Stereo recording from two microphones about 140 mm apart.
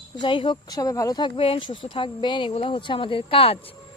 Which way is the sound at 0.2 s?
35° left (ahead or behind).